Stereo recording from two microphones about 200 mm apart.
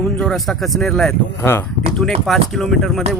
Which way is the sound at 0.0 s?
5° left (ahead or behind).